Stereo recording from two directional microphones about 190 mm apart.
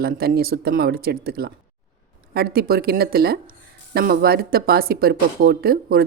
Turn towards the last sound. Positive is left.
turn(degrees=-55)  # may be behind; listen again after turning